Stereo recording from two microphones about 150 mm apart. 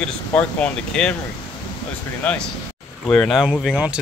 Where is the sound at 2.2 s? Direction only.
10° left (ahead or behind); by 4.0 s 5° right (ahead or behind).